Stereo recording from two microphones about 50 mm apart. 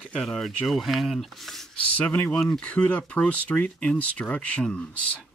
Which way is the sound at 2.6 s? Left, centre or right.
Left.